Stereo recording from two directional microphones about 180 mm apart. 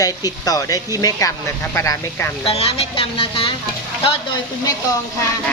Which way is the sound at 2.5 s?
35° left (ahead or behind).